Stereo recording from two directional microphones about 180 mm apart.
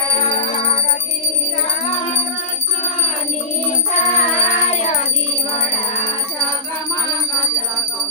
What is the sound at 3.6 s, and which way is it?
Music, 40° left (ahead or behind).